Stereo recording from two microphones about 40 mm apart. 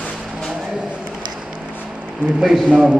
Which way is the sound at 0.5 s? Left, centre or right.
Centre.